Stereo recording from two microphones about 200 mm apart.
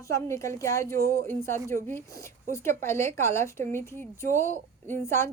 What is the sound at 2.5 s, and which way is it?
Speech, 10° left (ahead or behind).